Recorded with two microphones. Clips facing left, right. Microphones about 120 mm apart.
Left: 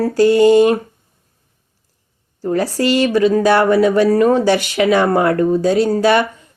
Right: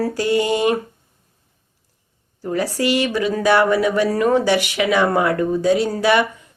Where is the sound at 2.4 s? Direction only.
35° left (ahead or behind).